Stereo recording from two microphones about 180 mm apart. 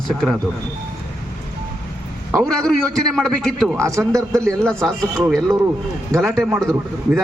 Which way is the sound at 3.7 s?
15° right (ahead or behind).